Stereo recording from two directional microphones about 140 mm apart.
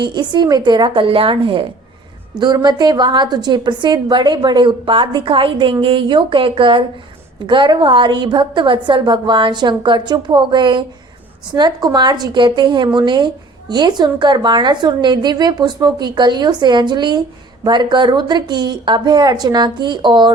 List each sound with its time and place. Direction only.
0.0 s a woman's voice: 30° right (ahead or behind)